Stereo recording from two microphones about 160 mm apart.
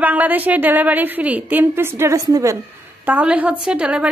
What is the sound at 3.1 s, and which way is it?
A woman's voice, 10° right (ahead or behind).